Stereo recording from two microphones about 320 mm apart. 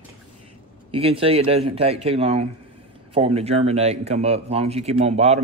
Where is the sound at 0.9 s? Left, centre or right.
Centre.